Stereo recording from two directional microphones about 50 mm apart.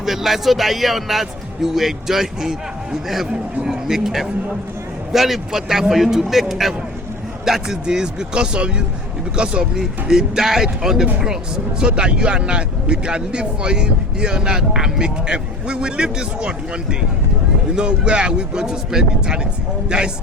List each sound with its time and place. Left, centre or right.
0.0 s a man's voice: centre
3.7 s speech: centre
17.7 s speech: centre